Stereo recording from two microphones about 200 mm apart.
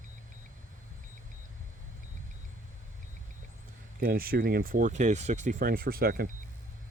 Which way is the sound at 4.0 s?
50° right (ahead or behind).